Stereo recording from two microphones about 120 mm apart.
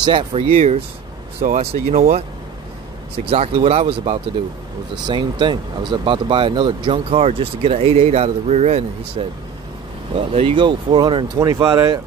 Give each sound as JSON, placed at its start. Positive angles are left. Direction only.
{"t": 0.0, "sound": "speech", "side_deg": -45}
{"t": 0.5, "sound": "speech", "side_deg": -65}
{"t": 3.3, "sound": "speech", "side_deg": -55}
{"t": 5.0, "sound": "speech", "side_deg": -40}
{"t": 10.1, "sound": "speech", "side_deg": -50}
{"t": 11.3, "sound": "speech", "side_deg": -25}